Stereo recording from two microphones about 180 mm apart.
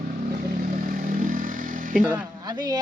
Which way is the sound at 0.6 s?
50° right (ahead or behind).